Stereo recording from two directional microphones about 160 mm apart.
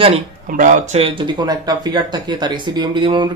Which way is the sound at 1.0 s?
35° right (ahead or behind).